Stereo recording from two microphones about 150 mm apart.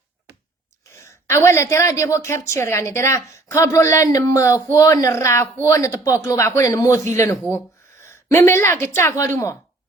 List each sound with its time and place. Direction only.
0.9 s a woman's voice: 20° left (ahead or behind)